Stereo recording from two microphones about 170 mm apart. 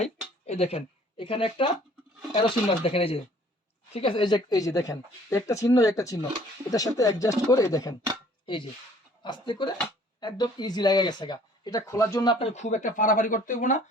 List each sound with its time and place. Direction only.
0.0 s speech: 40° left (ahead or behind)
12.5 s speech: 45° left (ahead or behind)